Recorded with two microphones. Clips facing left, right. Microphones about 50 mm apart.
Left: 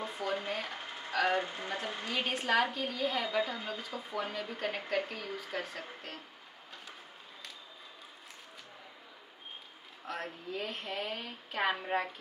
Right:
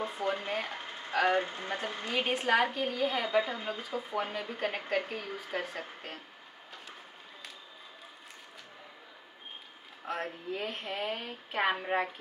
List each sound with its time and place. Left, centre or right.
0.0 s a sound: right
2.3 s a woman's voice: right
4.6 s a woman's voice: centre
10.0 s a woman's voice: centre